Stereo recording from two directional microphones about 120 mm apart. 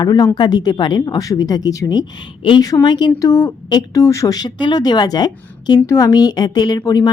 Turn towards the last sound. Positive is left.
turn(degrees=30)  # may be behind; listen again after turning